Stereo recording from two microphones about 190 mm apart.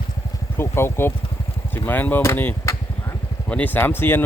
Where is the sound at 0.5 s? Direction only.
15° left (ahead or behind).